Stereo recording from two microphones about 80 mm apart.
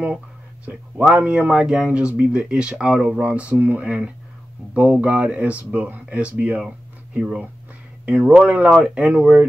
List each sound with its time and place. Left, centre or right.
0.7 s speech: centre